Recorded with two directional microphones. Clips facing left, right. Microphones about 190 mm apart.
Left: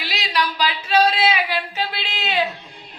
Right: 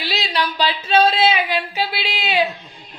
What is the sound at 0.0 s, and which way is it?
Female singing, 30° right (ahead or behind).